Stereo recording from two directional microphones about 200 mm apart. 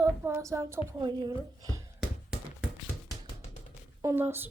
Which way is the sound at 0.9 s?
20° right (ahead or behind).